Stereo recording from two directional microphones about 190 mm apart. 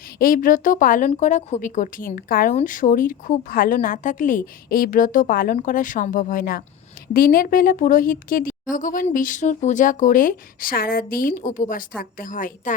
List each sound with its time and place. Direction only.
0.2 s speech: 45° left (ahead or behind)